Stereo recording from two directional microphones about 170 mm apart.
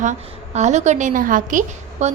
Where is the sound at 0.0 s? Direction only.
45° right (ahead or behind).